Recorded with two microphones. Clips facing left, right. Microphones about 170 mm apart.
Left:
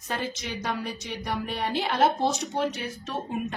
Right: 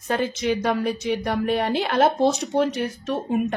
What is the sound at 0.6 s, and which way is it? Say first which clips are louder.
Speech: right 9 dB; 55° right (ahead or behind).